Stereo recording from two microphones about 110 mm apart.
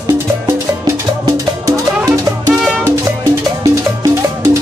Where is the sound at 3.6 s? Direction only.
35° right (ahead or behind).